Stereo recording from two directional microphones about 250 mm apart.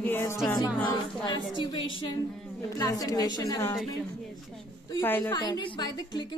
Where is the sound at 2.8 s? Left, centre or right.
Centre.